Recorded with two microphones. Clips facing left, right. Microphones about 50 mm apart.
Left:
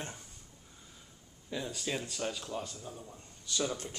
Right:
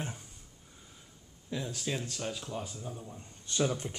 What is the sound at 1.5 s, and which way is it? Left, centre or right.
Speech, centre.